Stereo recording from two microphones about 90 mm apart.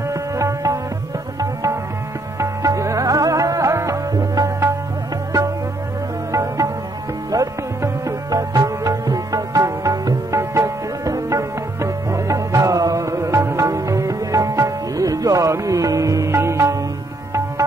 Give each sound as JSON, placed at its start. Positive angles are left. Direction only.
{"t": 0.1, "sound": "music", "side_deg": -35}
{"t": 1.4, "sound": "tabla", "side_deg": -35}
{"t": 2.3, "sound": "music", "side_deg": -35}
{"t": 6.3, "sound": "music", "side_deg": -35}